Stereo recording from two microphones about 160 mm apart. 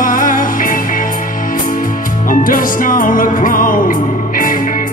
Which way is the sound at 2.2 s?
60° left (ahead or behind).